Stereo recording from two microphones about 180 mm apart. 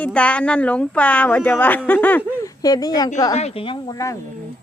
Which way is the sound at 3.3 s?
35° left (ahead or behind).